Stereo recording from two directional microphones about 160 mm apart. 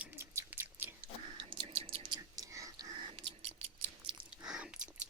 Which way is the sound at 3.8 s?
30° right (ahead or behind).